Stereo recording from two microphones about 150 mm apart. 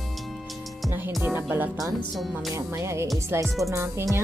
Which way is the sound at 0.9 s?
15° right (ahead or behind).